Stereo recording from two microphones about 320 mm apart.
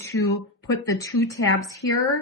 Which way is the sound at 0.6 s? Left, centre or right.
Centre.